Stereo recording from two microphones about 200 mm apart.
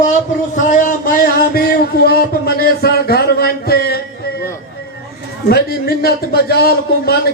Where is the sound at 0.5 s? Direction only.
40° left (ahead or behind).